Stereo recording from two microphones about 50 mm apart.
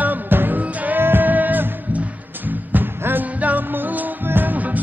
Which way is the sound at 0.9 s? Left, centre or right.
Right.